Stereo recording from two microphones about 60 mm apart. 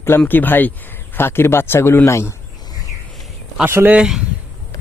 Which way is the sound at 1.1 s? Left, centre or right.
Left.